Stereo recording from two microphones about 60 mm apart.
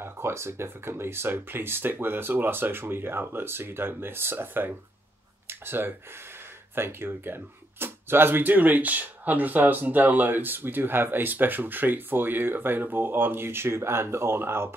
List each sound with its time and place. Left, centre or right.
0.0 s speech: right